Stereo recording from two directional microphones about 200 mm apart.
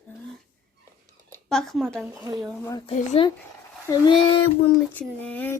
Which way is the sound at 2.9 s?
30° left (ahead or behind).